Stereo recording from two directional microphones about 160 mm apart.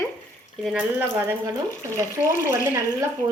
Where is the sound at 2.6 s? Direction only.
20° right (ahead or behind).